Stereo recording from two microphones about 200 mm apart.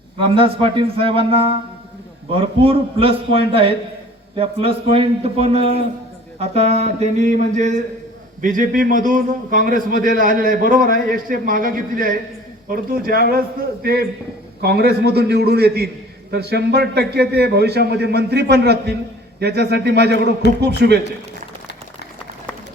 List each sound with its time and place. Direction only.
0.3 s a man's voice: 25° right (ahead or behind)
6.4 s a sound: 30° right (ahead or behind)
8.4 s a man's voice: 45° right (ahead or behind)